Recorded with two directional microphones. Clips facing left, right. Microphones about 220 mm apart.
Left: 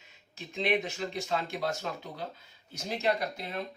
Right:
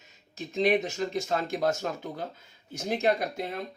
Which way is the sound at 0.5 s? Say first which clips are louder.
Right 5 dB; 40° right (ahead or behind).